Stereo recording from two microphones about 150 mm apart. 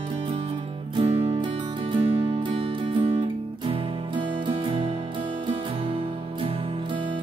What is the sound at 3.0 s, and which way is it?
Music, 35° right (ahead or behind).